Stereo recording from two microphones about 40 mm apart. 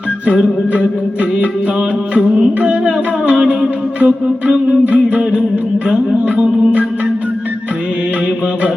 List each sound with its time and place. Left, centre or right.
2.6 s music: right
3.3 s music: centre
4.9 s music: right